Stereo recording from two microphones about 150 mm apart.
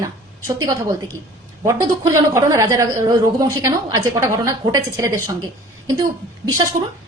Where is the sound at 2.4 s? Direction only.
20° right (ahead or behind).